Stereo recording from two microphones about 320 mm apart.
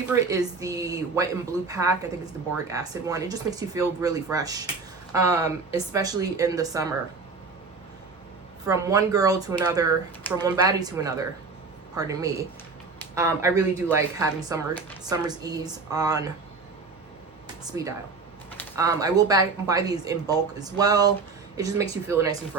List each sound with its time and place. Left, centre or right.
0.0 s speech: centre
8.6 s speech: centre
17.6 s speech: centre